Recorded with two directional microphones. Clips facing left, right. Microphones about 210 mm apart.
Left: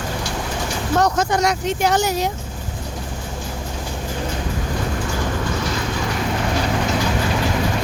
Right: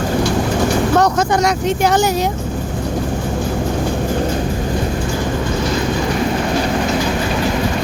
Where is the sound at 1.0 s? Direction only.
60° right (ahead or behind).